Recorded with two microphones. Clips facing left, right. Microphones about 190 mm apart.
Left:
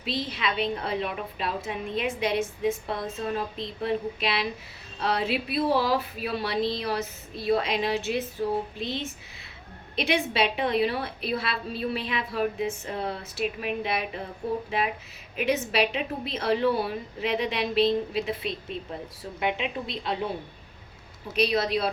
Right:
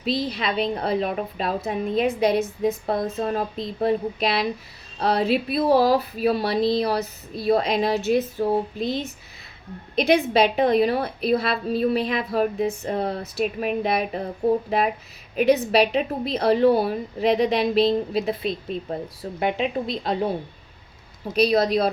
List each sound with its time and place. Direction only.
0.0 s a woman's voice: 40° right (ahead or behind)
21.3 s a woman's voice: 40° right (ahead or behind)